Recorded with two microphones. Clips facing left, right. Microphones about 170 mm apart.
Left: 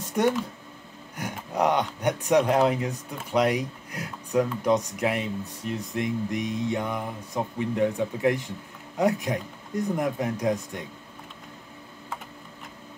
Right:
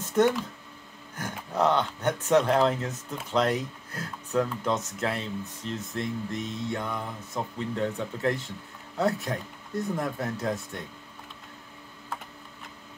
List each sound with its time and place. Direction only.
0.2 s speech: 10° left (ahead or behind)